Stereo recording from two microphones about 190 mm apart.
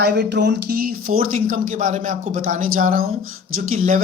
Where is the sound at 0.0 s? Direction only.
60° right (ahead or behind).